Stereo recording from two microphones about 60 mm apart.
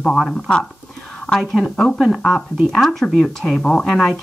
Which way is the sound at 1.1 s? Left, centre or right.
Centre.